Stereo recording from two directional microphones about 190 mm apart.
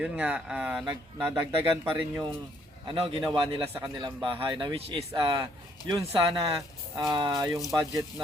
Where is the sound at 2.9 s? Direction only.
30° right (ahead or behind).